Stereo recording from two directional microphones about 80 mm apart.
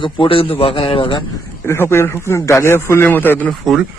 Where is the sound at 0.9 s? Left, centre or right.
Left.